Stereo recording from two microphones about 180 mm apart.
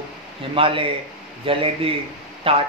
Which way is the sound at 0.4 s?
30° right (ahead or behind).